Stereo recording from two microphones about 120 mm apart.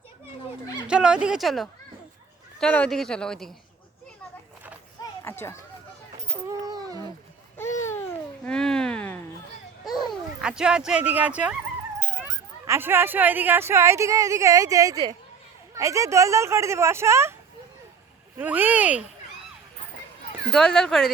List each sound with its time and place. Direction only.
0.9 s speech: 10° right (ahead or behind)
5.2 s run: 20° left (ahead or behind)
6.5 s a sound: 30° right (ahead or behind)
7.6 s babbling: 25° left (ahead or behind)
8.4 s a sound: 5° left (ahead or behind)
9.8 s a sound: centre (ahead or behind)
10.4 s speech: 5° right (ahead or behind); by 17.3 s 20° right (ahead or behind)
18.3 s speech: 15° right (ahead or behind)
20.5 s speech: 5° left (ahead or behind)